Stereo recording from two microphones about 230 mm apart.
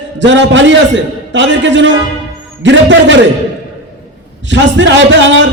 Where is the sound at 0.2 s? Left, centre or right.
Right.